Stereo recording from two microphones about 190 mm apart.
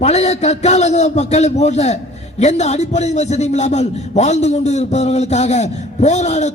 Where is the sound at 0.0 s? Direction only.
35° left (ahead or behind).